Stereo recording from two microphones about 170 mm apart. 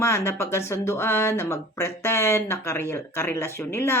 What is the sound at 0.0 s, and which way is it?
A woman's voice, 15° left (ahead or behind).